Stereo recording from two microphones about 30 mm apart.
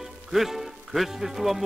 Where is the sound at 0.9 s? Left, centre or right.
Centre.